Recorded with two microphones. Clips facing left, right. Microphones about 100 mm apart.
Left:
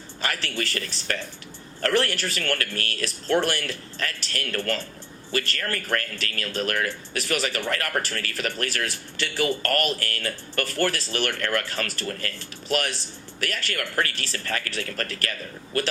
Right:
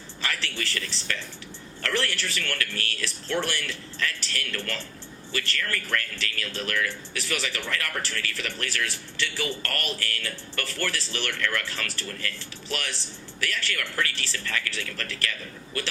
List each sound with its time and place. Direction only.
0.2 s speech: 50° left (ahead or behind)
13.4 s speech: 50° left (ahead or behind)